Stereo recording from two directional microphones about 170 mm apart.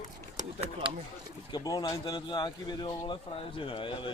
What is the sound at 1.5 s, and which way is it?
Speech, 25° left (ahead or behind).